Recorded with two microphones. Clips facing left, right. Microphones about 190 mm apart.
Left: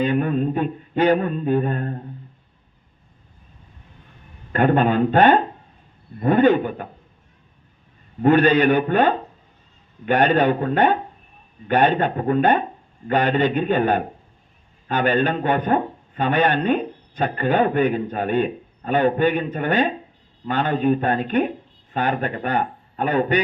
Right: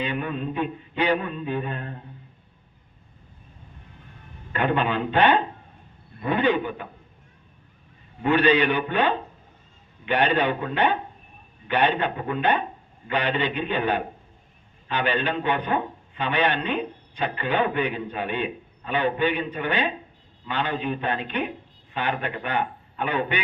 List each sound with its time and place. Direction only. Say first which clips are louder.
0.0 s a man's voice: left 8 dB; 45° left (ahead or behind)
4.5 s a man's voice: left 6 dB; 45° left (ahead or behind)
8.2 s a man's voice: left 5 dB; 45° left (ahead or behind)